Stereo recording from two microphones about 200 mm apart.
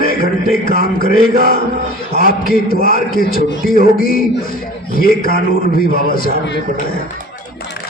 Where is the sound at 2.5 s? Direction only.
45° left (ahead or behind).